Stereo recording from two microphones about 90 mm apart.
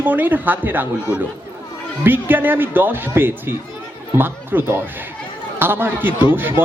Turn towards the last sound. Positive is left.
turn(degrees=-25)  # may be behind; listen again after turning